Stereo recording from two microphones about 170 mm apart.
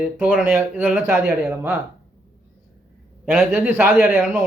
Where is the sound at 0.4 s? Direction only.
10° right (ahead or behind).